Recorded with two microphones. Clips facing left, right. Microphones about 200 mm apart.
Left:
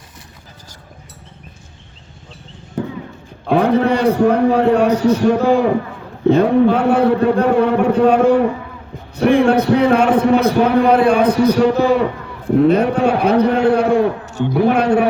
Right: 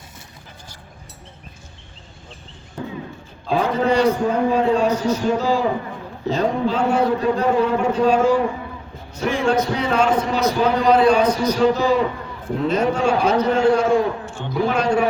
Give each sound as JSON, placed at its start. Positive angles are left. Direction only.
{"t": 3.4, "sound": "a man's voice", "side_deg": 65}